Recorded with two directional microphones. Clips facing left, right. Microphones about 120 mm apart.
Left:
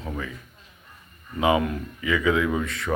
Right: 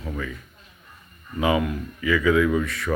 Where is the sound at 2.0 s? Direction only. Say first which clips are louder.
Right 3 dB; 25° left (ahead or behind).